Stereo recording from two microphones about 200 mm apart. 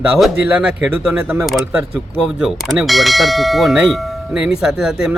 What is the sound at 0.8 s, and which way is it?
Speech, 10° right (ahead or behind).